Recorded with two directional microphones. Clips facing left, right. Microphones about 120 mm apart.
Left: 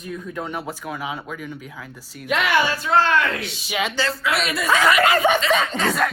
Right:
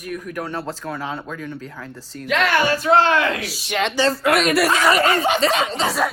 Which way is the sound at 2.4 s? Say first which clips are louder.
Right 2 dB; 60° right (ahead or behind).